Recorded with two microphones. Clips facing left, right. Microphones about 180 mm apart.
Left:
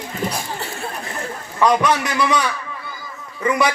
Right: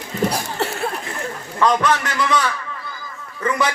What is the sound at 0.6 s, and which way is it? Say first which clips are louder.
Speech: right 7 dB; 70° right (ahead or behind).